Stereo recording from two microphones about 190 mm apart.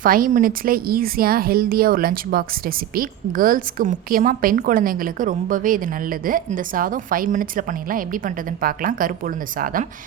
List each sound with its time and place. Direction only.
0.0 s speech: 45° right (ahead or behind)